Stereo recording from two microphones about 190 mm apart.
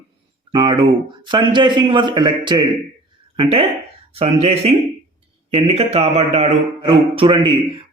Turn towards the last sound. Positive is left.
turn(degrees=-25)  # may be behind; listen again after turning